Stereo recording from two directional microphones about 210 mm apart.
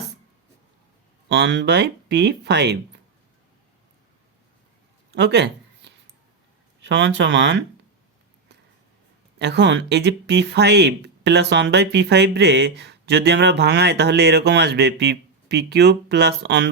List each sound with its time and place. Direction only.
1.3 s speech: 55° right (ahead or behind)
5.1 s a sound: 55° right (ahead or behind)
6.8 s speech: 55° right (ahead or behind)
9.4 s speech: 55° right (ahead or behind)